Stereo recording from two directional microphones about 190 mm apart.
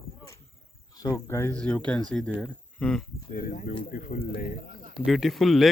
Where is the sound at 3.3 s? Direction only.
50° left (ahead or behind).